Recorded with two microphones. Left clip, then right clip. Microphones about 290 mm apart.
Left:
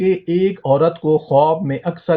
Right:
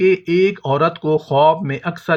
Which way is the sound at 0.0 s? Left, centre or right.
Right.